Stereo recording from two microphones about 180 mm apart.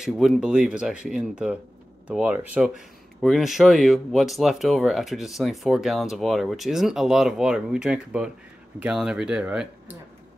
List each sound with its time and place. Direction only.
0.0 s speech: centre (ahead or behind)